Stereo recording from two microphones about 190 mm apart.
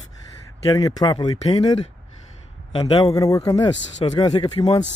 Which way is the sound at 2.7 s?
30° left (ahead or behind).